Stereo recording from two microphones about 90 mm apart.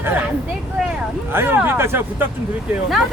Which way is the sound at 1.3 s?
25° right (ahead or behind).